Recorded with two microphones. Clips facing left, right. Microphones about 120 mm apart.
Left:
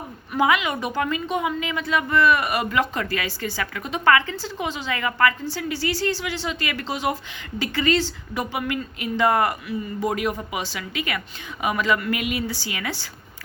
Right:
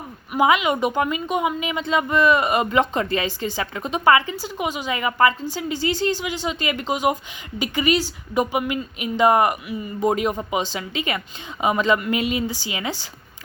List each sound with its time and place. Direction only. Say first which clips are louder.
0.3 s a woman's voice: right 3 dB; 20° right (ahead or behind)